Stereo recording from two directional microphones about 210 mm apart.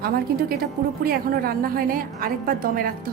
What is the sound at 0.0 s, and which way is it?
A woman's voice, 45° right (ahead or behind).